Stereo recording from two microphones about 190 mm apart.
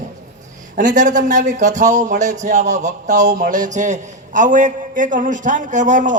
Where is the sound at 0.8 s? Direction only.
40° right (ahead or behind).